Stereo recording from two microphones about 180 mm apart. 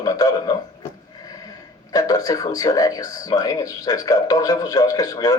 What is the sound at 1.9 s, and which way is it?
A man's voice, 20° left (ahead or behind).